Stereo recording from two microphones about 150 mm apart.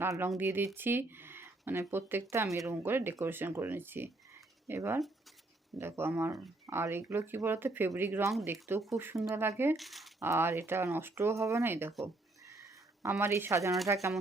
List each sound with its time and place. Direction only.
0.0 s speech: 15° right (ahead or behind)
9.7 s speech: centre (ahead or behind)
10.2 s speech: 20° right (ahead or behind)
13.0 s speech: 15° right (ahead or behind)